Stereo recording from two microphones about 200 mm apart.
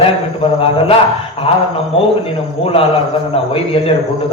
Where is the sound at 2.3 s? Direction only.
30° left (ahead or behind).